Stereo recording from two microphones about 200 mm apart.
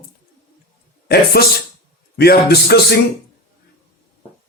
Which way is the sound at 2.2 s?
50° left (ahead or behind).